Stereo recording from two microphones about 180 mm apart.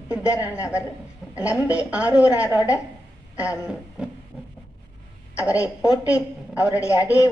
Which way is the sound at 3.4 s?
5° right (ahead or behind).